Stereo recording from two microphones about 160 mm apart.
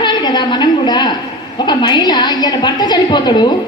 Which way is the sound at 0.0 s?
25° left (ahead or behind).